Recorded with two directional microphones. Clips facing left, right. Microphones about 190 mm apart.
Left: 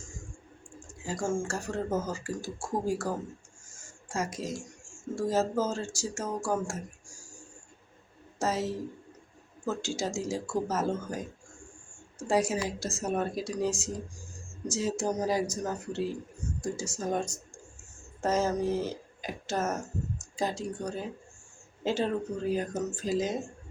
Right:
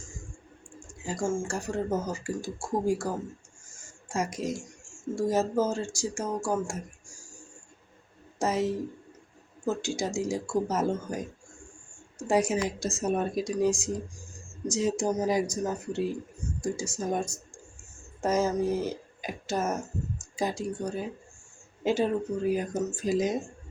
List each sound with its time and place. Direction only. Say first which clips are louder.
1.0 s speech: right 1 dB; 15° right (ahead or behind)
4.1 s speech: right 3 dB; 15° right (ahead or behind)
8.4 s speech: right 3 dB; 15° right (ahead or behind)
12.3 s a woman's voice: right 2 dB; 20° right (ahead or behind)